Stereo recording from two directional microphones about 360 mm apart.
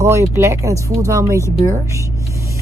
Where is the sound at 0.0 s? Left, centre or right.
Centre.